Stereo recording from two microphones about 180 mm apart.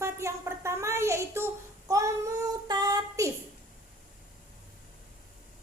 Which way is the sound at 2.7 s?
20° right (ahead or behind).